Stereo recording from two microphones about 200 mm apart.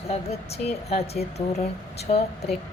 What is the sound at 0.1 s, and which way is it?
Speech, 30° left (ahead or behind).